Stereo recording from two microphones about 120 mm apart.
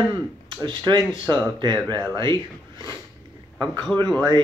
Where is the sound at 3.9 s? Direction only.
10° left (ahead or behind).